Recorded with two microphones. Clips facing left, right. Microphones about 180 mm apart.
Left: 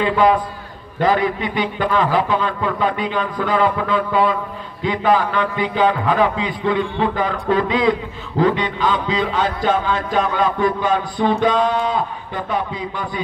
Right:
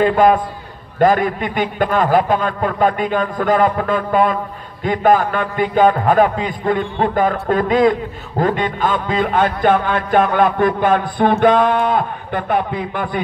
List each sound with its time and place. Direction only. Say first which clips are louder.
0.0 s a man's voice: right 3 dB; 50° right (ahead or behind)